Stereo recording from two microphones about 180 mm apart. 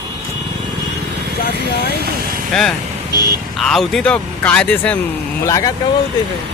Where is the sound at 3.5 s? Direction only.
Centre (ahead or behind).